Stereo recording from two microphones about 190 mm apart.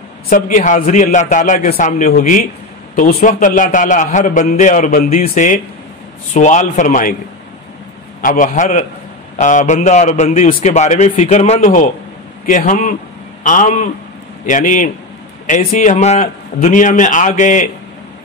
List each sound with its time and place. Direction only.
0.3 s a man's voice: 45° left (ahead or behind)
8.2 s a man's voice: 45° left (ahead or behind)